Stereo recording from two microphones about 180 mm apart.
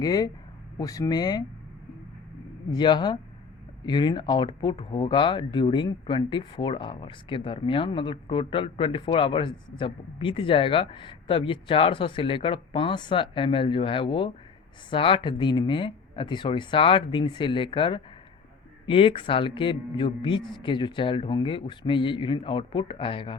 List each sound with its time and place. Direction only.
0.0 s speech: 20° left (ahead or behind)
2.6 s speech: 25° left (ahead or behind)